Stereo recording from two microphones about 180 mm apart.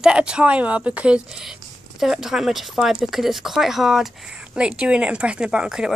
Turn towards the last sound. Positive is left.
turn(degrees=-5)  # may be behind; listen again after turning